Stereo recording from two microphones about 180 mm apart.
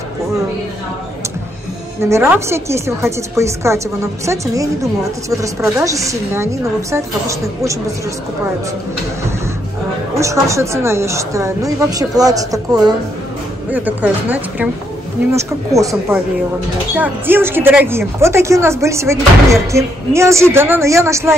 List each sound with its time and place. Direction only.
2.0 s speech: 15° right (ahead or behind)
10.1 s speech: 15° right (ahead or behind)
13.7 s speech: 10° right (ahead or behind)